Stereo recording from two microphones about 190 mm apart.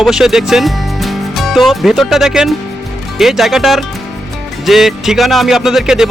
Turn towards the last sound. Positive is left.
turn(degrees=0)  # may be behind; listen again after turning